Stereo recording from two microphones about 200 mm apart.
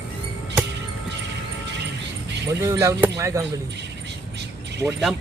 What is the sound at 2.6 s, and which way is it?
Speech, 15° right (ahead or behind).